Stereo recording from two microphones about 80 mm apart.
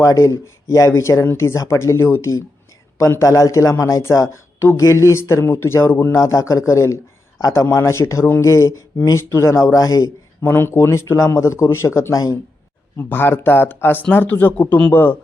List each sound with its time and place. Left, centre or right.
0.0 s speech: left
6.1 s speech: left
9.7 s a man's voice: left
10.4 s speech: left
13.0 s speech: left